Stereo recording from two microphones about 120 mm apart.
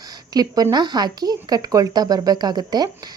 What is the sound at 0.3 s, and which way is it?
Speech, 35° right (ahead or behind).